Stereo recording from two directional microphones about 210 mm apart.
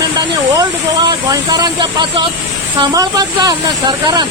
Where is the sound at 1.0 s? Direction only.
20° right (ahead or behind).